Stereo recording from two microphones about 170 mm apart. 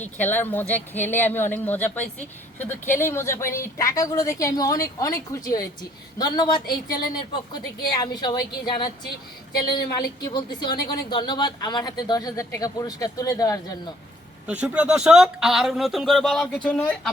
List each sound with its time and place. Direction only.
0.0 s a woman's voice: 10° left (ahead or behind)
10.2 s speech: 25° left (ahead or behind)
14.4 s speech: 10° right (ahead or behind)